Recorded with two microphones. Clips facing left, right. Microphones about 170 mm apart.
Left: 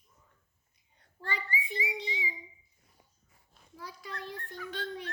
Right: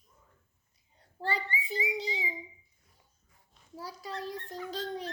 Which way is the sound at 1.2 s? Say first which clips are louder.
Right 3 dB; 35° right (ahead or behind).